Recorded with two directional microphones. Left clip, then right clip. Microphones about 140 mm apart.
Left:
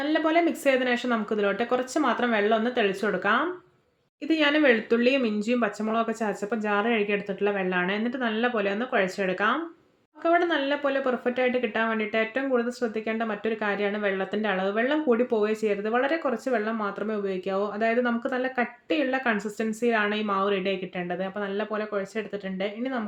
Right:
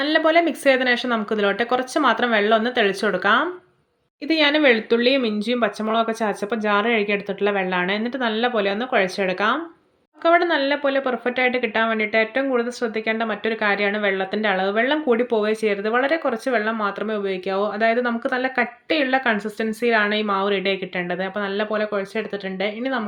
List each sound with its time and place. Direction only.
0.0 s speech: 25° right (ahead or behind)